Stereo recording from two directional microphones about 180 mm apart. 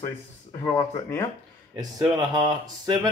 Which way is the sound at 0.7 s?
15° left (ahead or behind).